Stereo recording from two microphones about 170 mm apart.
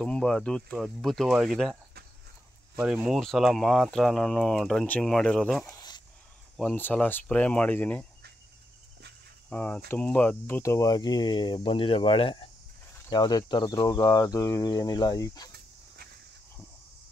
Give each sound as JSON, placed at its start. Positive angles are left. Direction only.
{"t": 0.0, "sound": "speech", "side_deg": 5}
{"t": 2.8, "sound": "speech", "side_deg": -5}
{"t": 5.8, "sound": "a sound", "side_deg": 25}
{"t": 6.5, "sound": "speech", "side_deg": 5}
{"t": 9.5, "sound": "speech", "side_deg": 10}